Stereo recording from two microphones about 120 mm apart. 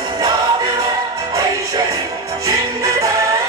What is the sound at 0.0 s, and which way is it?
Music, 35° right (ahead or behind).